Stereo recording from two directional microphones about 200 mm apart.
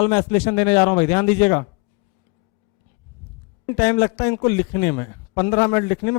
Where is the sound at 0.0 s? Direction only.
15° left (ahead or behind).